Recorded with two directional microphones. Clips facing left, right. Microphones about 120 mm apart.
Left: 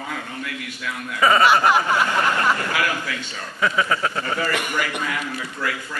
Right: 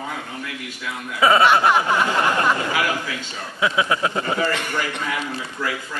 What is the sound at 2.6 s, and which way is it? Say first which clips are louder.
Speech: right 1 dB; 20° right (ahead or behind).